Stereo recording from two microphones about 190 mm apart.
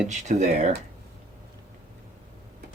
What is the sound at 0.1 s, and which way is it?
Speech, 40° right (ahead or behind).